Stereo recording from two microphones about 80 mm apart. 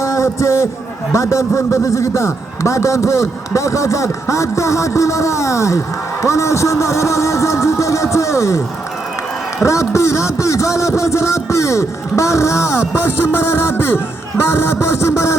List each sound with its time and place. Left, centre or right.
0.0 s a man's voice: left
9.6 s a man's voice: left